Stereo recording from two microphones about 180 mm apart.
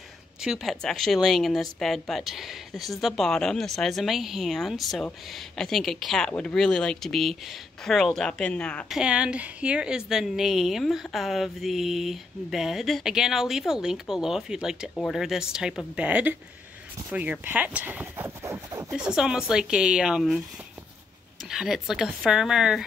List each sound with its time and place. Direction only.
0.4 s speech: centre (ahead or behind)
18.9 s speech: 5° right (ahead or behind)
21.5 s speech: centre (ahead or behind)